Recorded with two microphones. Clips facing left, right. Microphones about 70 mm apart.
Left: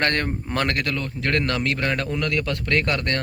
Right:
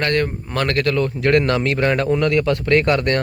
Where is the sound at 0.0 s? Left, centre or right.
Left.